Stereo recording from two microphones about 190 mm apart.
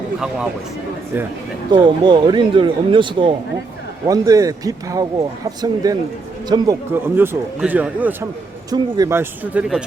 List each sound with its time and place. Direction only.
1.7 s a man's voice: 25° right (ahead or behind); by 9.8 s 5° right (ahead or behind)